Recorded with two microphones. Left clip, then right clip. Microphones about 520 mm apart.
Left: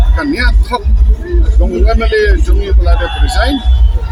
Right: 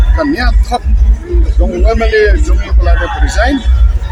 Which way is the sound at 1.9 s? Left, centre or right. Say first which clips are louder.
Right 3 dB; left.